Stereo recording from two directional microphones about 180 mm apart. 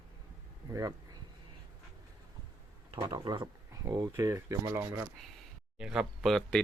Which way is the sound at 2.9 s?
25° right (ahead or behind).